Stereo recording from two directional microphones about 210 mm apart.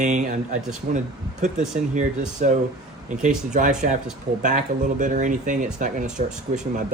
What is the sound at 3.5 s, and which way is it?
Speech, 35° right (ahead or behind).